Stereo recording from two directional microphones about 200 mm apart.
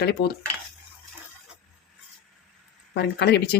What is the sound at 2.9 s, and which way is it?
Speech, 55° left (ahead or behind).